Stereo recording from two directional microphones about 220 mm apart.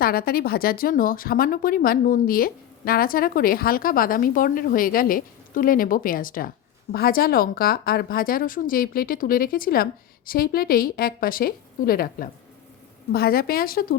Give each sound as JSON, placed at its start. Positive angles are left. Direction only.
{"t": 0.0, "sound": "speech", "side_deg": 40}